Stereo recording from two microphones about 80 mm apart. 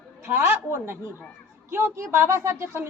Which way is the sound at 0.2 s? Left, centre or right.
Right.